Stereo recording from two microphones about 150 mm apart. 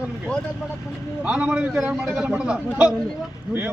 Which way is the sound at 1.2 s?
5° right (ahead or behind).